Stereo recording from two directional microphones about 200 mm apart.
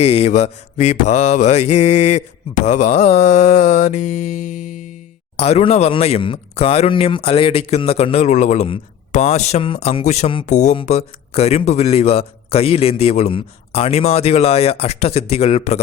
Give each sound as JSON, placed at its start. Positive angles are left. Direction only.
{"t": 0.0, "sound": "speech", "side_deg": 30}